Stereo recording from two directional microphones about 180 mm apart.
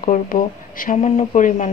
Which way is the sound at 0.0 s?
50° left (ahead or behind).